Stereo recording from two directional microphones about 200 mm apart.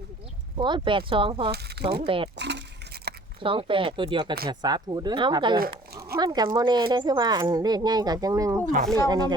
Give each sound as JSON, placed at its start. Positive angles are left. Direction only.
{"t": 0.5, "sound": "speech", "side_deg": -25}
{"t": 1.5, "sound": "speech", "side_deg": -55}
{"t": 2.0, "sound": "speech", "side_deg": -25}
{"t": 2.3, "sound": "a sound", "side_deg": -60}
{"t": 3.4, "sound": "speech", "side_deg": -25}